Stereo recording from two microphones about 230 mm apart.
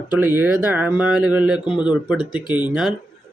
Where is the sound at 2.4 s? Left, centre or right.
Centre.